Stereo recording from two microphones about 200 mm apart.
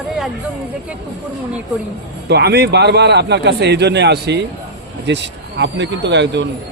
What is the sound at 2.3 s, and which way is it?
A man's voice, 55° right (ahead or behind).